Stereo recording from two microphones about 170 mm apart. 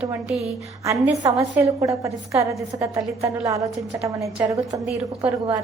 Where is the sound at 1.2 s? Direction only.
20° right (ahead or behind).